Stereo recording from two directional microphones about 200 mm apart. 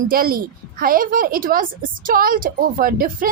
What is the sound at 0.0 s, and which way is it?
A woman's voice, 45° right (ahead or behind).